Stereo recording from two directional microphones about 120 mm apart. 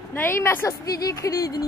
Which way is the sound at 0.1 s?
20° left (ahead or behind).